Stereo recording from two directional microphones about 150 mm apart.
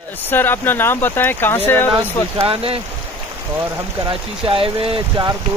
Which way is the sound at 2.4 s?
40° right (ahead or behind).